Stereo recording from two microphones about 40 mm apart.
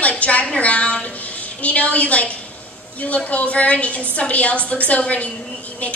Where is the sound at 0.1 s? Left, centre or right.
Left.